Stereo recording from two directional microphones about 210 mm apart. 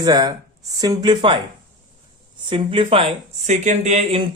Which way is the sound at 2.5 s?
25° right (ahead or behind).